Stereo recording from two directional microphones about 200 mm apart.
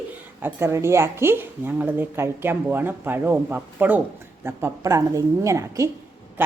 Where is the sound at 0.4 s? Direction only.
10° right (ahead or behind).